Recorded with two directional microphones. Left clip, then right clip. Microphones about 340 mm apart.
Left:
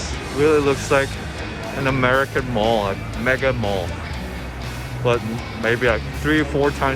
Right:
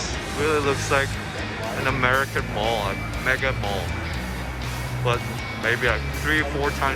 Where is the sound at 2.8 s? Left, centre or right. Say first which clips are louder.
Left 3 dB; centre.